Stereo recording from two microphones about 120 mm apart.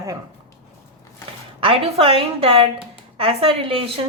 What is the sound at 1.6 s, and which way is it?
A woman's voice, 50° right (ahead or behind).